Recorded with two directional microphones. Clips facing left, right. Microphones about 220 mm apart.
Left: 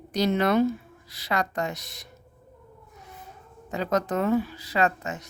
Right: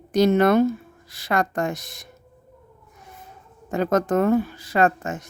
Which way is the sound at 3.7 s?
50° right (ahead or behind).